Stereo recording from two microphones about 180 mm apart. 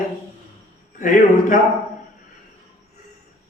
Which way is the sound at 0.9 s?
45° left (ahead or behind).